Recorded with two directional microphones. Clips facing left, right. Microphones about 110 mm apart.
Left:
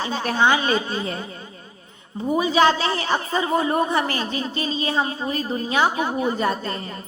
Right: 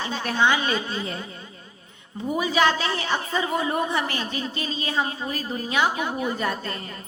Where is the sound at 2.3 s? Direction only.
30° left (ahead or behind).